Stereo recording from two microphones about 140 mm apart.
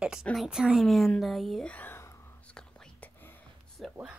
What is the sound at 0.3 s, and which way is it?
Speech, centre (ahead or behind).